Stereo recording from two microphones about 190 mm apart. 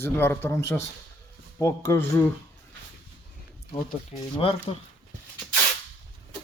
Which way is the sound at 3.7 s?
25° left (ahead or behind).